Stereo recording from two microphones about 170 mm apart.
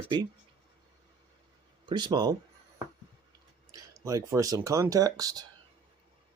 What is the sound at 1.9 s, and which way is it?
Speech, 25° right (ahead or behind).